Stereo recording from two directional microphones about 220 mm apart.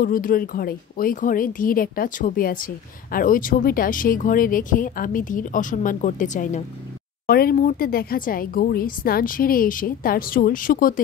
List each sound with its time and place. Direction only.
0.0 s speech: 40° left (ahead or behind)